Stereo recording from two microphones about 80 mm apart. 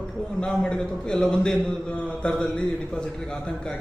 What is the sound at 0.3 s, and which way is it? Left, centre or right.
A man's voice, centre.